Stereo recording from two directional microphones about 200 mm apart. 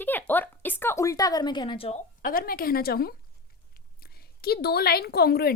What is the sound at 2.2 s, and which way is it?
A woman's voice, 45° left (ahead or behind).